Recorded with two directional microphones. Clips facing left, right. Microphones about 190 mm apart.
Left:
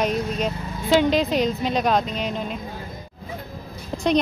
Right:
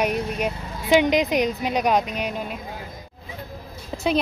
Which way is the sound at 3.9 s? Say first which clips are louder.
Left 1 dB; centre (ahead or behind).